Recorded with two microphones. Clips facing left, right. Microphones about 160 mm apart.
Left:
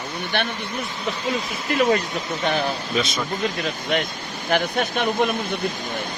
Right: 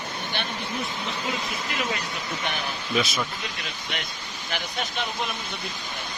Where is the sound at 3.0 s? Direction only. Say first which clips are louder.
Even; centre (ahead or behind).